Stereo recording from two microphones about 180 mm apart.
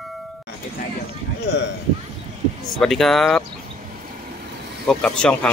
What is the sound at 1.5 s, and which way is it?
Speech, 75° left (ahead or behind).